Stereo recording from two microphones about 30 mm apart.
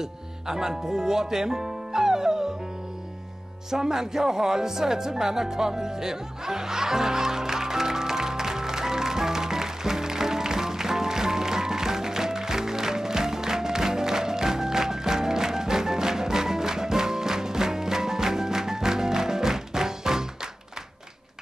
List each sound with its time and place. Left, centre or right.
0.0 s speech: centre
3.7 s music: centre